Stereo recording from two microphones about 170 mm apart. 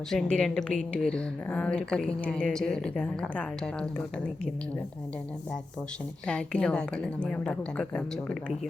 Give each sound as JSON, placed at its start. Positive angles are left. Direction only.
{"t": 0.1, "sound": "a woman's voice", "side_deg": 0}
{"t": 6.2, "sound": "a woman's voice", "side_deg": 5}